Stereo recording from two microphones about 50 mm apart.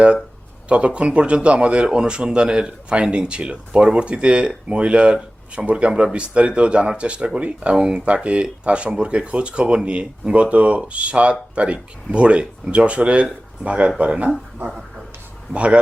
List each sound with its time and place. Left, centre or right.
0.7 s speech: right
14.7 s speech: centre
15.5 s speech: right